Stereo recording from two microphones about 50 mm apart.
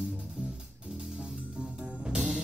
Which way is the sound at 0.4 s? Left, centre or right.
Centre.